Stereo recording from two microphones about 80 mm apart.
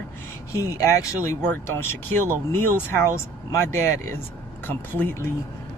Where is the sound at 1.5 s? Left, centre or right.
Left.